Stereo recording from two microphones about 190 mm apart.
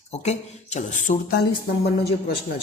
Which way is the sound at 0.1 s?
35° left (ahead or behind).